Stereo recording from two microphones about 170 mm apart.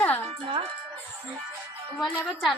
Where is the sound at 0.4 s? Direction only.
30° right (ahead or behind).